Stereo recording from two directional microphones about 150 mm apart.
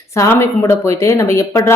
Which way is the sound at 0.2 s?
20° left (ahead or behind).